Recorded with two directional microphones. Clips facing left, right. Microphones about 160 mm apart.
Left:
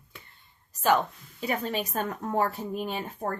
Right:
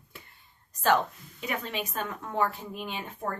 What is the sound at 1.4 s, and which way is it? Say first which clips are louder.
Speech: left 4 dB; 35° left (ahead or behind).